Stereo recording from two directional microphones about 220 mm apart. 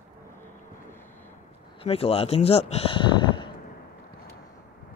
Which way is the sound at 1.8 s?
25° left (ahead or behind).